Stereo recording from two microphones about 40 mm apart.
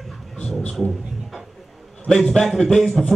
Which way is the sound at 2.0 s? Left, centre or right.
Centre.